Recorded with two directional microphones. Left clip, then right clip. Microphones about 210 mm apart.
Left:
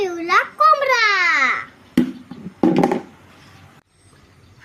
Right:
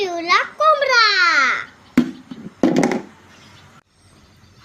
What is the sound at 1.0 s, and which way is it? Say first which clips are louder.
Babbling: right 1 dB; 20° left (ahead or behind).